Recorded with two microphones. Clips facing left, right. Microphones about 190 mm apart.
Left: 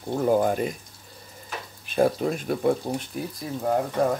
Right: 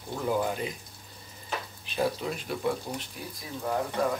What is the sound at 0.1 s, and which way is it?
Speech, 45° left (ahead or behind).